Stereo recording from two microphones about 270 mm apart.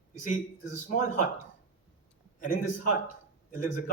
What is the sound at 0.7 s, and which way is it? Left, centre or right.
Speech, left.